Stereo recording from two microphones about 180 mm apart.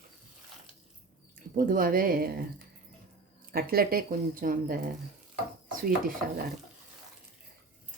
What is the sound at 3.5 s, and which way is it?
Speech, 55° right (ahead or behind).